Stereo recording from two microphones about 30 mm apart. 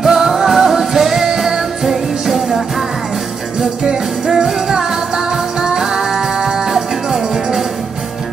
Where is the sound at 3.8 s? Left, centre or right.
Right.